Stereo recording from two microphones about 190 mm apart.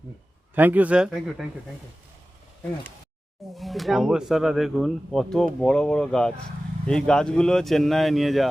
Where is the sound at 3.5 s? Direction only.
Centre (ahead or behind).